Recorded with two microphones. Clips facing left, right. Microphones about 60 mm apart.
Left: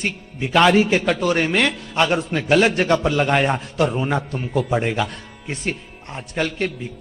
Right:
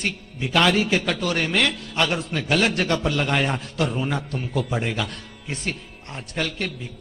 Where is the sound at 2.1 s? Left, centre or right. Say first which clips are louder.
Left 5 dB; centre.